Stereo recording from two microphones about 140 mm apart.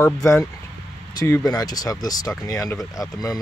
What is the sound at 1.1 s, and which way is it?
Speech, 25° left (ahead or behind).